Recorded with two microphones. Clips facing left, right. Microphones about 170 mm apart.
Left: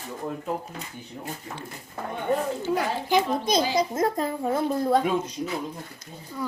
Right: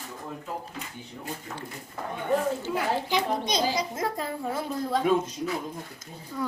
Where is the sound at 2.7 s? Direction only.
50° left (ahead or behind).